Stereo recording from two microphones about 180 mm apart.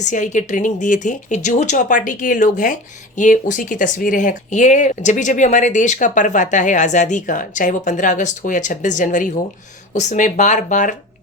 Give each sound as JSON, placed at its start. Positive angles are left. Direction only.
{"t": 0.0, "sound": "speech", "side_deg": 40}